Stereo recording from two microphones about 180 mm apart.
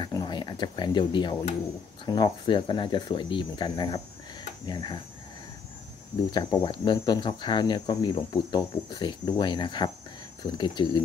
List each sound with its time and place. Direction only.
0.0 s a sound: 25° left (ahead or behind)
2.0 s speech: 20° left (ahead or behind)
6.3 s speech: 25° left (ahead or behind)